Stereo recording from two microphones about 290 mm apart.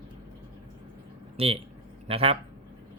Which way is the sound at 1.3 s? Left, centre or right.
Centre.